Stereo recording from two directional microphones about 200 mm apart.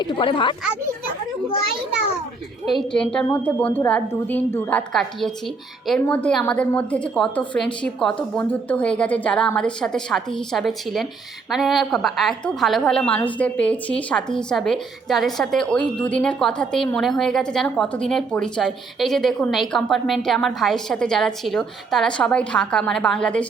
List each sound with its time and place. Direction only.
0.0 s a child's voice: 25° left (ahead or behind)
2.6 s a woman's voice: centre (ahead or behind)